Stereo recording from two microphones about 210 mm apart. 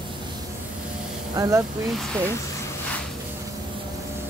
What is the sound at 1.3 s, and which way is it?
Speech, 15° right (ahead or behind).